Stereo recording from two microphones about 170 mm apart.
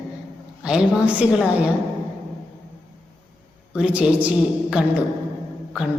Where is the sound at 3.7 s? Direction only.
5° right (ahead or behind).